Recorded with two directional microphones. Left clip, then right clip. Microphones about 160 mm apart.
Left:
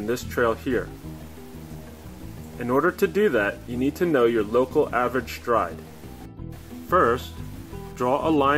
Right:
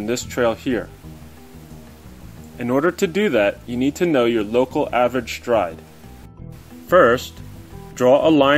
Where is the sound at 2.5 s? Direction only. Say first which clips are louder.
Right 3 dB; 45° right (ahead or behind).